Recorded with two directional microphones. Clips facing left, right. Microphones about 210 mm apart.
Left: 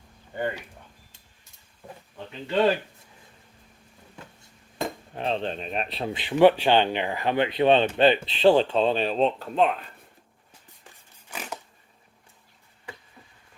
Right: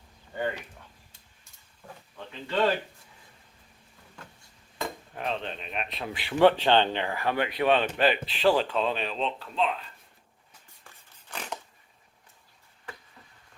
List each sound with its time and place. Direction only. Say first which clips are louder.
0.3 s speech: left 2 dB; 10° left (ahead or behind)
5.1 s speech: left 5 dB; 30° left (ahead or behind)
6.1 s speech: left 3 dB; 15° left (ahead or behind); by 9.9 s 55° left (ahead or behind)
11.3 s vehicle: left 1 dB; 10° left (ahead or behind)